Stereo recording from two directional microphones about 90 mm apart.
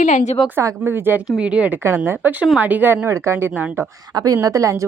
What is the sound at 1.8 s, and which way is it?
Speech, 25° right (ahead or behind).